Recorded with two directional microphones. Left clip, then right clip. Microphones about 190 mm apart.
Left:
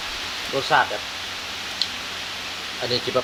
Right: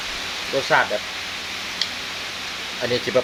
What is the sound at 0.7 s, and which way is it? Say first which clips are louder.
Speech: even; 35° right (ahead or behind).